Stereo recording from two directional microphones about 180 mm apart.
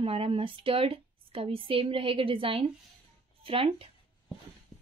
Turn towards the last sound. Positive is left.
turn(degrees=-30)  # may be behind; listen again after turning